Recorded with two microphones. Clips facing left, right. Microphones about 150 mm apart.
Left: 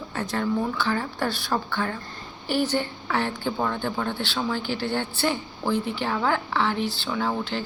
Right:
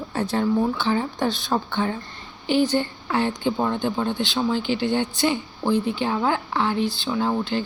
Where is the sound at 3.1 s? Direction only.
15° right (ahead or behind).